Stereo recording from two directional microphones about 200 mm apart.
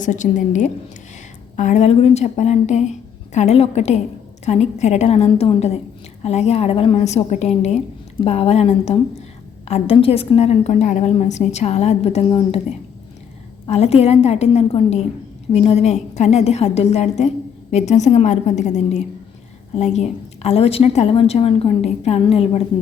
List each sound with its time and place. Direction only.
0.0 s a woman's voice: 40° left (ahead or behind)
13.7 s a woman's voice: 30° left (ahead or behind)